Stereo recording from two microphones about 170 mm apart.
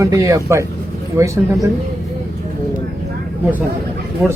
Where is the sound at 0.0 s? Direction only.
20° right (ahead or behind).